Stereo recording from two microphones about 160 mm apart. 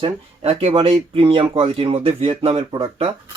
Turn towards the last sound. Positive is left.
turn(degrees=-35)  # may be behind; listen again after turning